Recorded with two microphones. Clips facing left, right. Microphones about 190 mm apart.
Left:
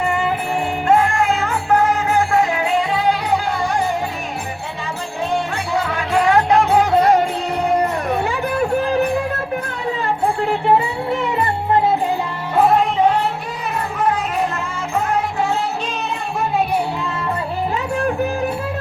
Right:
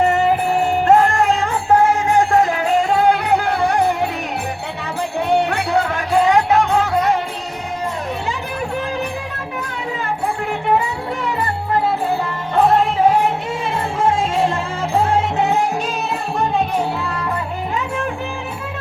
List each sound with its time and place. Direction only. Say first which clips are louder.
0.0 s music: right 5 dB; 40° right (ahead or behind)
2.3 s music: right 2 dB; 40° right (ahead or behind); by 3.9 s 60° right (ahead or behind)
5.3 s music: right 5 dB; 65° right (ahead or behind)
6.1 s music: right 1 dB; 20° right (ahead or behind)
6.9 s music: left 6 dB; 35° left (ahead or behind)
7.7 s music: left 5 dB; 60° left (ahead or behind)
12.5 s music: even; centre (ahead or behind)
14.0 s music: right 3 dB; 25° right (ahead or behind)